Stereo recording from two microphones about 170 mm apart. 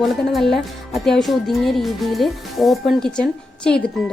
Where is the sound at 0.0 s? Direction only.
Centre (ahead or behind).